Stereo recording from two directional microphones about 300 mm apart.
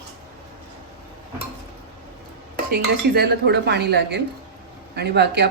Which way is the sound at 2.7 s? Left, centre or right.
Right.